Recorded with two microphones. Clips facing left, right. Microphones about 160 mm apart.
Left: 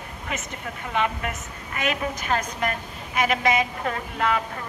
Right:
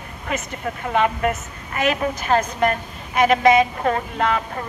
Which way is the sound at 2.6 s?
45° right (ahead or behind).